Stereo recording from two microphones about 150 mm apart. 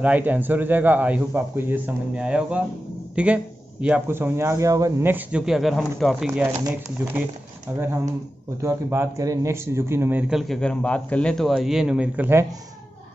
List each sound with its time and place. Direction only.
0.0 s a man's voice: 10° right (ahead or behind)
8.6 s a man's voice: 20° right (ahead or behind)
10.3 s a man's voice: 5° left (ahead or behind); by 12.4 s 15° right (ahead or behind)